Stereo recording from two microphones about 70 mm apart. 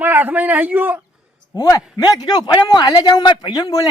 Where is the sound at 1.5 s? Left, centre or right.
Left.